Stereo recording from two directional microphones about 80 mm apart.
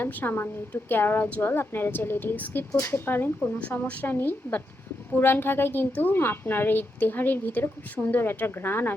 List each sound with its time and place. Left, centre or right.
0.0 s a woman's voice: left